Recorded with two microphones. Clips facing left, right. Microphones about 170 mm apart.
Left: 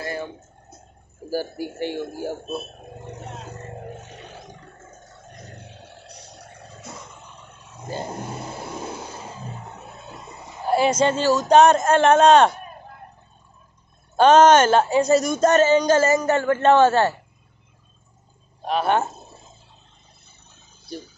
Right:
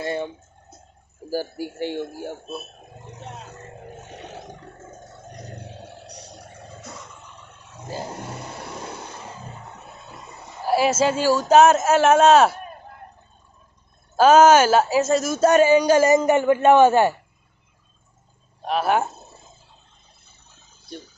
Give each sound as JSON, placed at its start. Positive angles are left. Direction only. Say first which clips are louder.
{"t": 0.0, "sound": "a sound", "louder": "right 3 dB", "side_deg": -25}
{"t": 1.8, "sound": "speech", "louder": "even", "side_deg": -15}
{"t": 10.6, "sound": "speech", "louder": "even", "side_deg": -5}
{"t": 14.1, "sound": "speech", "louder": "even", "side_deg": -5}
{"t": 18.6, "sound": "speech", "louder": "even", "side_deg": 0}